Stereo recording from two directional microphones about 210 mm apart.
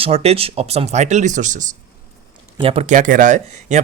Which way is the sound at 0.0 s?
30° right (ahead or behind).